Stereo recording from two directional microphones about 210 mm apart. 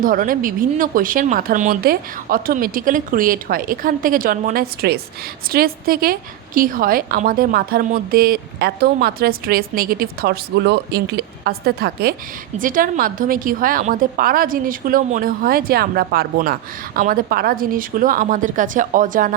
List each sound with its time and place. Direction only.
0.0 s a woman's voice: 40° right (ahead or behind)